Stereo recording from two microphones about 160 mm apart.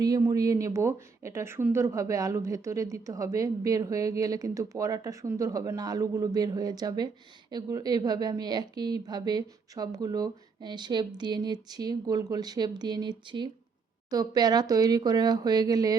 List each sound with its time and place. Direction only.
0.0 s speech: 25° right (ahead or behind)